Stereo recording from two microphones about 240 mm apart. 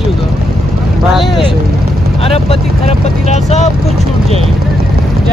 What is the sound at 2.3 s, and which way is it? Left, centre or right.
Speech, left.